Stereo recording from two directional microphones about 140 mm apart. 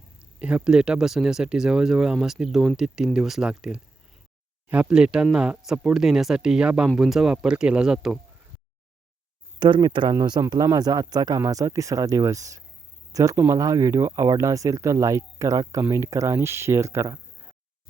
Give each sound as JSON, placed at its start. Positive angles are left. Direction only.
{"t": 0.3, "sound": "speech", "side_deg": -5}
{"t": 9.6, "sound": "speech", "side_deg": -35}